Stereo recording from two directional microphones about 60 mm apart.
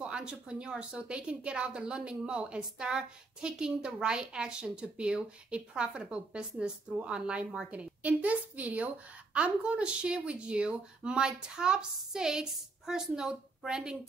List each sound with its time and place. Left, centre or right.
0.0 s a woman's voice: centre